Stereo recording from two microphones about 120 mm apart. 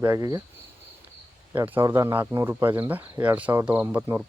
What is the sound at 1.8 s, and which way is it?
Speech, 25° right (ahead or behind).